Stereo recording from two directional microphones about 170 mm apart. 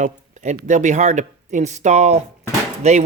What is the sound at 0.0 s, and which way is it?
Speech, 45° right (ahead or behind).